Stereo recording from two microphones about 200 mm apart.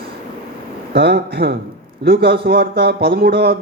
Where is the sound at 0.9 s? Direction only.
55° right (ahead or behind).